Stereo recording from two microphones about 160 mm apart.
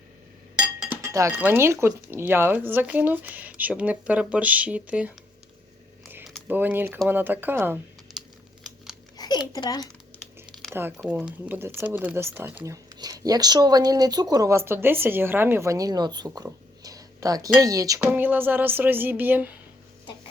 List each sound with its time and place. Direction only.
0.6 s chink: 5° right (ahead or behind)
1.0 s speech: 20° right (ahead or behind)
6.5 s speech: 10° right (ahead or behind)
8.1 s computer keyboard: centre (ahead or behind)
9.1 s a sound: 25° left (ahead or behind)
10.5 s a sound: centre (ahead or behind)
10.9 s speech: 5° right (ahead or behind); by 16.5 s 25° right (ahead or behind)
16.5 s a sound: 20° right (ahead or behind)
18.0 s speech: 10° right (ahead or behind)